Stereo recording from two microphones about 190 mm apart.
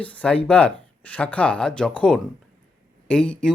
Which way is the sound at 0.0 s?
5° left (ahead or behind).